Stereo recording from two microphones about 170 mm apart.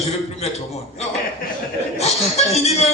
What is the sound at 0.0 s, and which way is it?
A man's voice, 40° left (ahead or behind).